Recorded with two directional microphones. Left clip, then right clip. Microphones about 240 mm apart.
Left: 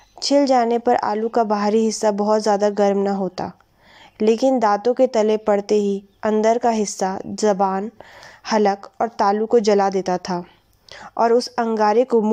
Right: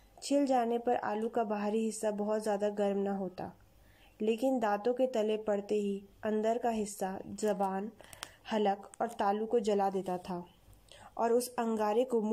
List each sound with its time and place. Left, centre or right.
0.2 s a woman's voice: left
10.9 s a sound: left
11.5 s a woman's voice: left